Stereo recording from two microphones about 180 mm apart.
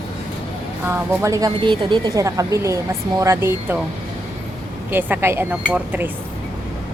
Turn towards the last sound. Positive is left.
turn(degrees=-10)  # may be behind; listen again after turning